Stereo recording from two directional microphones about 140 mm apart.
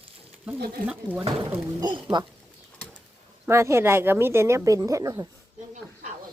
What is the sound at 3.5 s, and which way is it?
A woman's voice, 20° right (ahead or behind).